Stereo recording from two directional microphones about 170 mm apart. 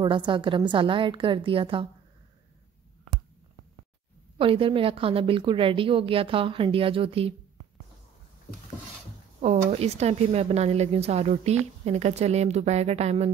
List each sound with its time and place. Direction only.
0.0 s speech: 30° right (ahead or behind)
4.4 s speech: 30° right (ahead or behind)
9.4 s speech: 40° right (ahead or behind)